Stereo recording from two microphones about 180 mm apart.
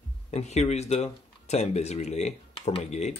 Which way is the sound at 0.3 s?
40° left (ahead or behind).